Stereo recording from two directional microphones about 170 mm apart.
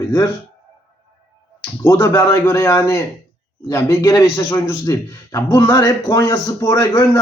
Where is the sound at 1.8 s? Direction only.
15° left (ahead or behind).